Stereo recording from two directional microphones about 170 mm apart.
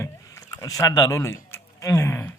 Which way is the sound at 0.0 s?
20° left (ahead or behind).